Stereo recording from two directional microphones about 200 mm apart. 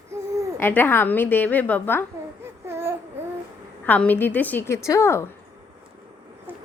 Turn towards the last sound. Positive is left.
turn(degrees=-10)  # may be behind; listen again after turning